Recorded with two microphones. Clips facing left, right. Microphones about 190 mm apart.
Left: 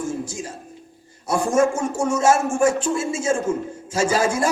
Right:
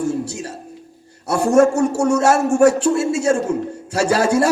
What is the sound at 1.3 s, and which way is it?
A man's voice, 70° right (ahead or behind).